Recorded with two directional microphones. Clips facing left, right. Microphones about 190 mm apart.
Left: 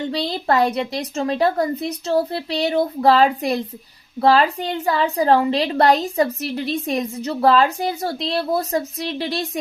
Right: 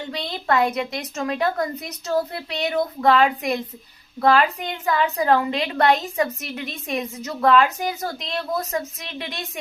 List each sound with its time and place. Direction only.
0.1 s a woman's voice: 35° left (ahead or behind)